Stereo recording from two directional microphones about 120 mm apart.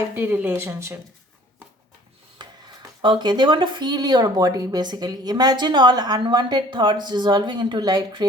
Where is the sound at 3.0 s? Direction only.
40° right (ahead or behind).